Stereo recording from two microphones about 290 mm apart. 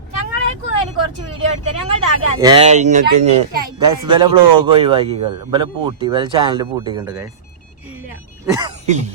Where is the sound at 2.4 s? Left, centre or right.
Centre.